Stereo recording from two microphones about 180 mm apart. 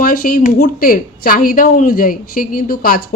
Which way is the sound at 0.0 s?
50° left (ahead or behind).